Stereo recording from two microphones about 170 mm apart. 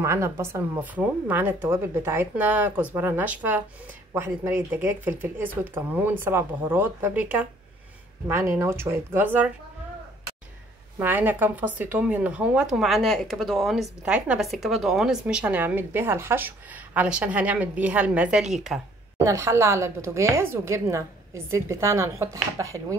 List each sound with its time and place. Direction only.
0.0 s a woman's voice: 15° right (ahead or behind)
11.0 s a woman's voice: 10° right (ahead or behind)
19.1 s a woman's voice: 15° right (ahead or behind)